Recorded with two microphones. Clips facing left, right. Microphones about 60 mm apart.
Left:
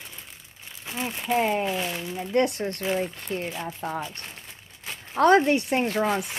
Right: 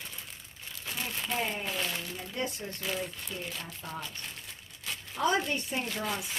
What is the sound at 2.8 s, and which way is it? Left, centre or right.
Speech, left.